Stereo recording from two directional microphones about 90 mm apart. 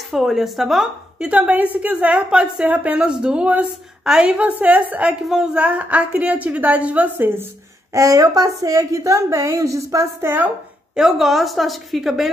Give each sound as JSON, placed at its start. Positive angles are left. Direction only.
{"t": 0.1, "sound": "a woman's voice", "side_deg": -5}
{"t": 1.3, "sound": "a woman's voice", "side_deg": -15}
{"t": 7.9, "sound": "a woman's voice", "side_deg": -40}
{"t": 11.0, "sound": "a woman's voice", "side_deg": -5}